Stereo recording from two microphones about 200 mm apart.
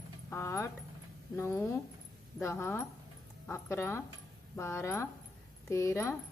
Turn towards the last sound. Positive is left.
turn(degrees=15)  # may be behind; listen again after turning